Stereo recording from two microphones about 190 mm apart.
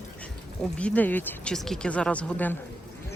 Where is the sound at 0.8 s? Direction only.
5° left (ahead or behind).